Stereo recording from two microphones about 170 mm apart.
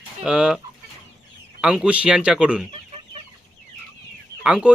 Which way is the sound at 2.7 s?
35° right (ahead or behind).